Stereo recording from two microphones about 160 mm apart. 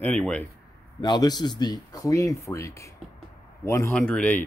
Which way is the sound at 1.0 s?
25° left (ahead or behind).